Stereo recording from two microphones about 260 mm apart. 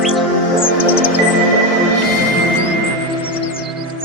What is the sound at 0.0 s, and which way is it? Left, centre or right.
Music, centre.